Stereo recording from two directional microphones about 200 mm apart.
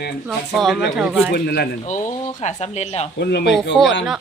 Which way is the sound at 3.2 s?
60° left (ahead or behind).